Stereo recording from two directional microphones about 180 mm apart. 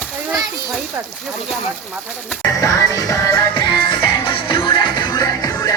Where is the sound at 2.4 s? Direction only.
20° left (ahead or behind).